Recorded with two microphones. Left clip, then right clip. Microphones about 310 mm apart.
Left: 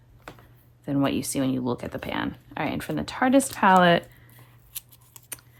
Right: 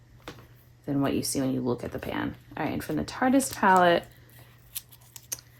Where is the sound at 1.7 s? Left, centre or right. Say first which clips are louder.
Left 2 dB; centre.